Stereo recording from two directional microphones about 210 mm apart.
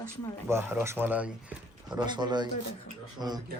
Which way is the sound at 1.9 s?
20° right (ahead or behind).